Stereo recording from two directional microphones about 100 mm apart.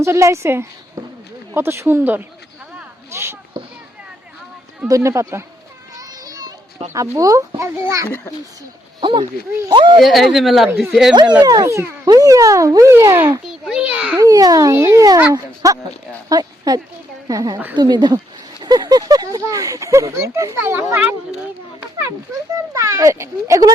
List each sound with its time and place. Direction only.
0.0 s a woman's voice: 30° right (ahead or behind)
3.6 s a sound: 45° right (ahead or behind)
4.9 s a woman's voice: 30° right (ahead or behind)
6.0 s children playing: 40° right (ahead or behind)
7.2 s speech: 35° right (ahead or behind)
9.0 s speech: 55° right (ahead or behind)
10.0 s speech: centre (ahead or behind)
11.1 s speech: 45° right (ahead or behind); by 13.3 s 25° right (ahead or behind)
13.5 s a child's voice: 5° right (ahead or behind)
14.2 s a woman's voice: 35° right (ahead or behind)
22.7 s speech: 35° right (ahead or behind)